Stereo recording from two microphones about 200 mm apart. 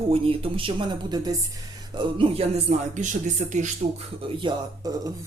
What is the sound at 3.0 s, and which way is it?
Speech, 35° right (ahead or behind).